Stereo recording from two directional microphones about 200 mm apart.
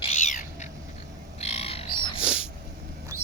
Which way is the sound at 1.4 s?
30° left (ahead or behind).